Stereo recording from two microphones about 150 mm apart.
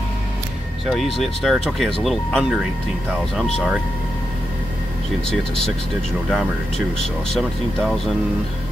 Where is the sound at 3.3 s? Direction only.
Centre (ahead or behind).